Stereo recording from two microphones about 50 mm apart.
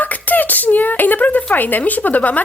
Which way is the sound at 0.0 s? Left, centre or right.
Left.